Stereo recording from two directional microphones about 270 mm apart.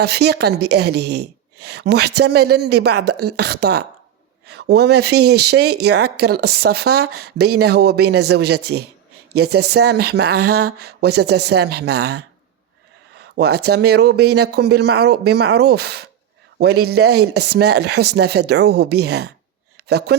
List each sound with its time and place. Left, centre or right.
0.0 s a woman's voice: right
13.3 s a woman's voice: right
19.7 s a sound: right